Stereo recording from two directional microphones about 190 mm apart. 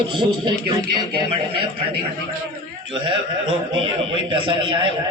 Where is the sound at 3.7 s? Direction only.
25° right (ahead or behind).